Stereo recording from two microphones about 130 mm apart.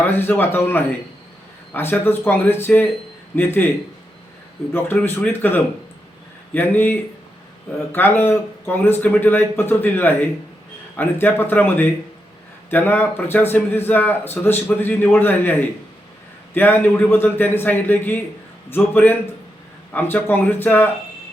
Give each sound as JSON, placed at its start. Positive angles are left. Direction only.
{"t": 0.0, "sound": "a man's voice", "side_deg": 15}
{"t": 4.7, "sound": "a man's voice", "side_deg": 15}